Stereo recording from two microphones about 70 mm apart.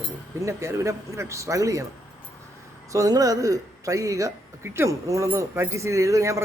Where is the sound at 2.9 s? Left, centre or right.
Right.